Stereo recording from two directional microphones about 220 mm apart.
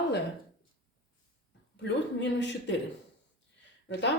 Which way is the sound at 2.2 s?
55° left (ahead or behind).